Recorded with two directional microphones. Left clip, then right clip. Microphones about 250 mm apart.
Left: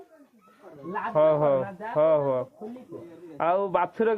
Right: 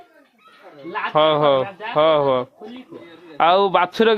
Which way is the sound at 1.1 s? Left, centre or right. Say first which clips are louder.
Right 6 dB; right.